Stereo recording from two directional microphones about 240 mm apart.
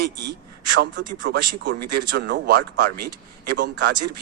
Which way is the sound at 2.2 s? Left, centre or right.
Right.